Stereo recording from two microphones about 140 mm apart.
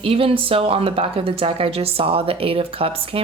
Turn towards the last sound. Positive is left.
turn(degrees=-40)  # may be behind; listen again after turning